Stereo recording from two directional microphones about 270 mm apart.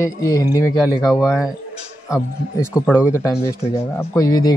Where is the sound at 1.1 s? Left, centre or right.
Centre.